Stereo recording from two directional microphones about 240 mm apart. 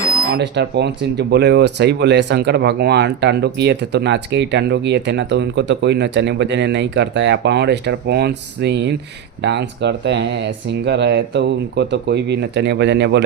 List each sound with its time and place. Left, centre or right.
0.3 s speech: right